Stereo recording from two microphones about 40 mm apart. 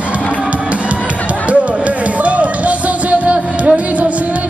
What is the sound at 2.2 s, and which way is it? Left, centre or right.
Music, right.